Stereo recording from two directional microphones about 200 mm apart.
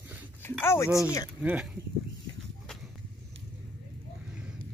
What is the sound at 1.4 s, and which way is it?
Speech, 5° right (ahead or behind).